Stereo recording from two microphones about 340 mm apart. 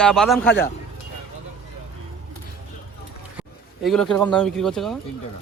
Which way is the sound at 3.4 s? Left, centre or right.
Centre.